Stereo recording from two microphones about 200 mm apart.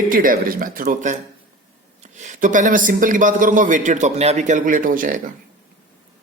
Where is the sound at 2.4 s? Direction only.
40° right (ahead or behind).